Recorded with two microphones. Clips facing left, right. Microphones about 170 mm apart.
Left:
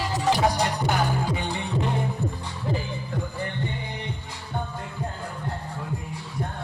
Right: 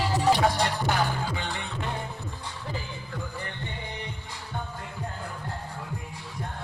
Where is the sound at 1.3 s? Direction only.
20° left (ahead or behind).